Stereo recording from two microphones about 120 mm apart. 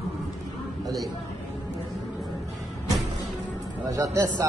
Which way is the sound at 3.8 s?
25° right (ahead or behind).